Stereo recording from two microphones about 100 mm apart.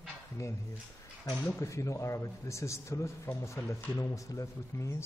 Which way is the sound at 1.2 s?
15° left (ahead or behind).